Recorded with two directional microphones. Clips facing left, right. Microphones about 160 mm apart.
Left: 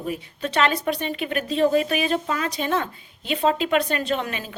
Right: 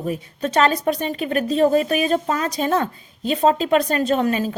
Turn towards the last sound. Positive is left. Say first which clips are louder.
# right 7 dB
turn(degrees=-40)  # may be behind; listen again after turning